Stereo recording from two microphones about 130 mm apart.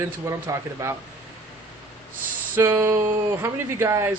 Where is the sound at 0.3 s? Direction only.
20° right (ahead or behind).